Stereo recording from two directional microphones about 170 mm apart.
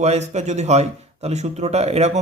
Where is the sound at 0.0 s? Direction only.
40° right (ahead or behind).